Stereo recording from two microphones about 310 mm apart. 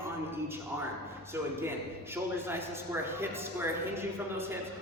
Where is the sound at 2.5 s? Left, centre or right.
Centre.